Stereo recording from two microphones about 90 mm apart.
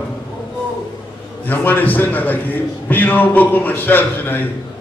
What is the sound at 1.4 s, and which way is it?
A man's voice, 20° left (ahead or behind).